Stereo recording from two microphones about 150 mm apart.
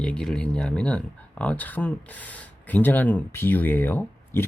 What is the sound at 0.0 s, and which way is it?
Speech, 5° left (ahead or behind).